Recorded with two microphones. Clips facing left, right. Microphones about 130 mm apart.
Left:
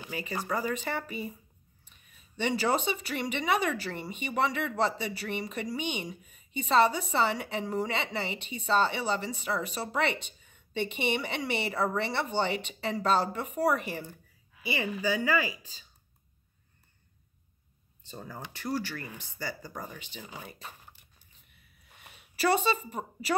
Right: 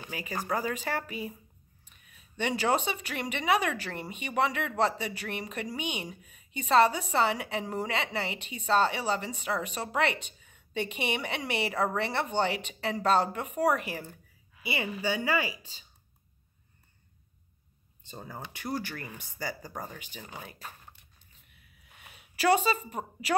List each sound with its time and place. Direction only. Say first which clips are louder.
0.1 s speech: even; 10° right (ahead or behind)
14.7 s a woman's voice: left 1 dB; 25° right (ahead or behind)
18.0 s a woman's voice: even; 20° right (ahead or behind)
21.8 s a sound: even; centre (ahead or behind)